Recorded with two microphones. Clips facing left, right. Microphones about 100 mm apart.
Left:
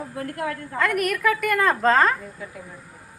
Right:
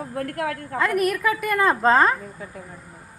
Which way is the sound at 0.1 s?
55° right (ahead or behind).